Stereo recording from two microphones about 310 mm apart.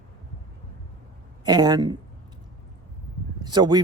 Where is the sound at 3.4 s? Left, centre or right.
Centre.